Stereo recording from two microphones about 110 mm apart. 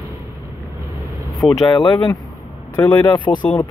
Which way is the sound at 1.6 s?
40° left (ahead or behind).